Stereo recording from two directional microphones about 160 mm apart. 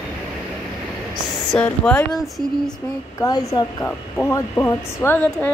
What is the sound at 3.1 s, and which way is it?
Speech, 20° left (ahead or behind).